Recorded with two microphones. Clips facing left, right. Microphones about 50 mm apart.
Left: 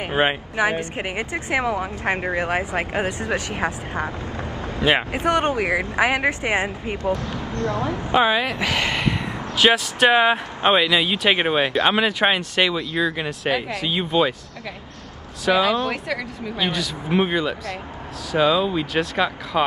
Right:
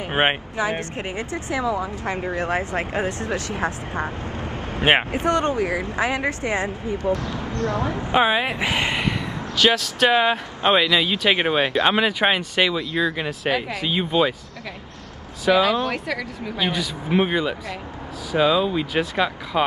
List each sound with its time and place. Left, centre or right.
0.1 s speech: right
0.9 s speech: left
1.6 s speech: left
4.0 s vehicle: right
5.1 s speech: left
5.5 s speech: left
7.7 s a woman's voice: right
8.1 s speech: centre
9.6 s speech: centre
15.4 s speech: centre